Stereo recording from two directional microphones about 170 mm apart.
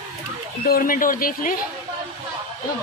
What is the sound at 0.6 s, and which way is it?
Speech, 55° left (ahead or behind).